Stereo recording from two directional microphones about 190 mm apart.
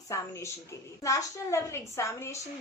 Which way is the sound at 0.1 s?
15° left (ahead or behind).